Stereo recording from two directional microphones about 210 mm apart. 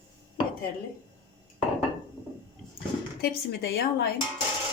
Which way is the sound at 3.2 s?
50° left (ahead or behind).